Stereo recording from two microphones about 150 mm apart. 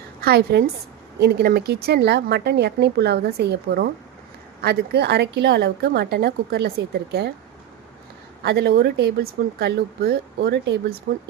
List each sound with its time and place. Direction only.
0.2 s a woman's voice: 90° right
8.4 s speech: 90° right